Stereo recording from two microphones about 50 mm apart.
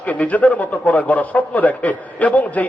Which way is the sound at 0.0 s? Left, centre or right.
Left.